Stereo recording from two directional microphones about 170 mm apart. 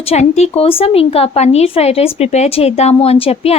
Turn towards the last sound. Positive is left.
turn(degrees=35)  # may be behind; listen again after turning